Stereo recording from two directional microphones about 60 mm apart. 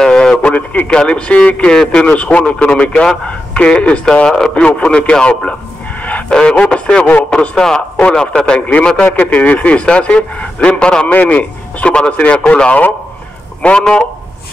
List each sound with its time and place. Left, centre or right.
0.0 s radio: centre
0.8 s a man's voice: centre
4.3 s a man's voice: centre
4.6 s a man's voice: left
6.0 s a sound: left
6.3 s a man's voice: centre